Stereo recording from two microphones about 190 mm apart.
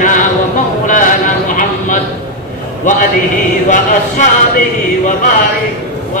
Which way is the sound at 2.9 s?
40° left (ahead or behind).